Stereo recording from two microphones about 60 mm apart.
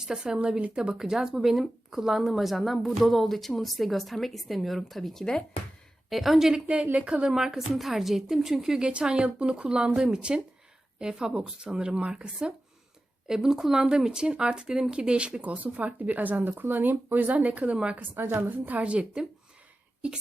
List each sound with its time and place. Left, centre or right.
0.0 s a woman's voice: centre
6.1 s speech: centre
6.5 s a woman's voice: centre
7.3 s a woman's voice: centre
17.9 s speech: right